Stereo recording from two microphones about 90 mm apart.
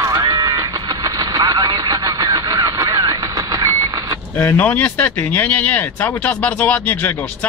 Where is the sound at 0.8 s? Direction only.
45° right (ahead or behind).